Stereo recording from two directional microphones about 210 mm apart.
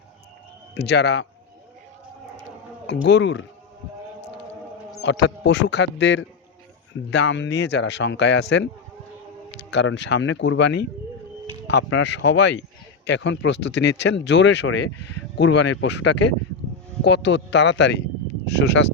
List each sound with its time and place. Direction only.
0.7 s speech: 55° left (ahead or behind)
2.8 s speech: 55° left (ahead or behind)
5.0 s speech: 60° left (ahead or behind)